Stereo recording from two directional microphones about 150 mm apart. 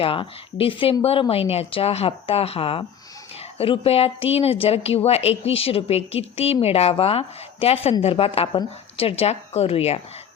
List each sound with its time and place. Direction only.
0.0 s a woman's voice: 35° left (ahead or behind)